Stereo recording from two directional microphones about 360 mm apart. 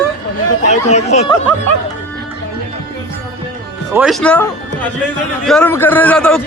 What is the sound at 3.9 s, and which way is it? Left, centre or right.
A man's voice, centre.